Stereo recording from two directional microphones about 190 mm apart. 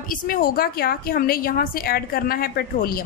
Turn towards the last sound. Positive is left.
turn(degrees=50)  # may be behind; listen again after turning